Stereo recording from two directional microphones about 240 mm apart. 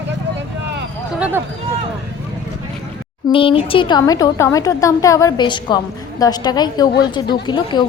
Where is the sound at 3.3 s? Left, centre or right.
Left.